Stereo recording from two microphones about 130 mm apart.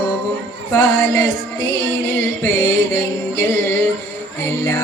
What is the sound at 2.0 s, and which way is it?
Music, 20° left (ahead or behind).